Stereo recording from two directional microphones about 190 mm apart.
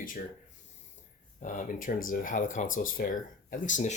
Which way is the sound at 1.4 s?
45° left (ahead or behind).